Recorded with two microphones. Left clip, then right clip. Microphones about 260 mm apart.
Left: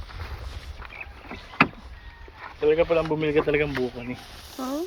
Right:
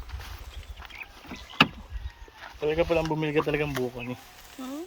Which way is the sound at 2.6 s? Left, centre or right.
Right.